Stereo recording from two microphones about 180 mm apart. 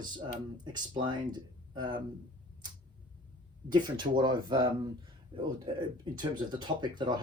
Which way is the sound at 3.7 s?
25° right (ahead or behind).